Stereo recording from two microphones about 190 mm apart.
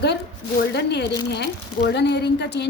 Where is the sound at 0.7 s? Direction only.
60° left (ahead or behind).